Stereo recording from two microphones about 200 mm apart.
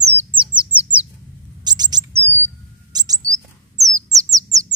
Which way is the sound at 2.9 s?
20° right (ahead or behind).